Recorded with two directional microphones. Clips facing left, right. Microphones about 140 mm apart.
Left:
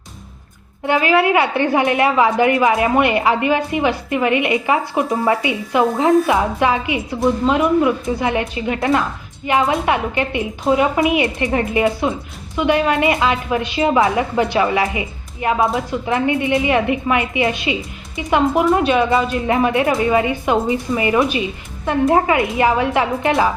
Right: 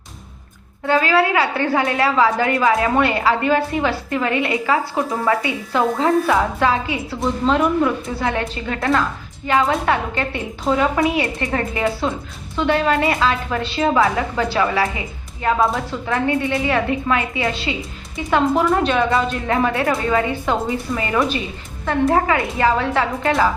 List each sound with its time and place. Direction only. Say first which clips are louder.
0.9 s a woman's voice: left 1 dB; 20° left (ahead or behind)